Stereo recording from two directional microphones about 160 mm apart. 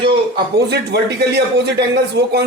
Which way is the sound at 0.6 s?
90° right.